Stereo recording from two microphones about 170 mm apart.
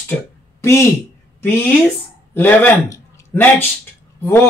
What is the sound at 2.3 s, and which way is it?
A man's voice, 10° left (ahead or behind).